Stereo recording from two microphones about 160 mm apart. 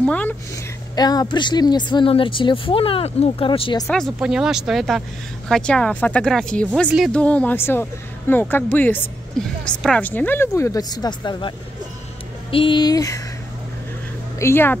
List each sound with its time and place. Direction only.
0.0 s speech: 10° left (ahead or behind)
0.9 s speech: 25° left (ahead or behind)
3.8 s speech: 5° left (ahead or behind); by 13.2 s 20° left (ahead or behind)
14.4 s speech: 15° left (ahead or behind)